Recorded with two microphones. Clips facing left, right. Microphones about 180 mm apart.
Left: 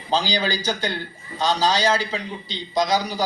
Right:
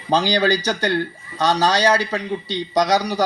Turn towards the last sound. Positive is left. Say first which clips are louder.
# right 4 dB
turn(degrees=-70)  # may be behind; listen again after turning